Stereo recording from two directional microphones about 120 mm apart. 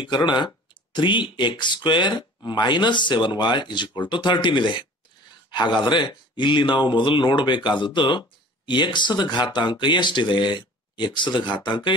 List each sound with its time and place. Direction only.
0.0 s a man's voice: 40° left (ahead or behind)